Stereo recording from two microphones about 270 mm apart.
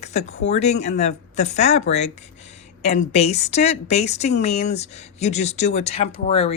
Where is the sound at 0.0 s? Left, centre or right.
Left.